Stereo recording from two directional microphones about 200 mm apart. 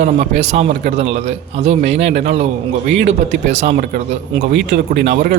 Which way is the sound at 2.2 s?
35° right (ahead or behind).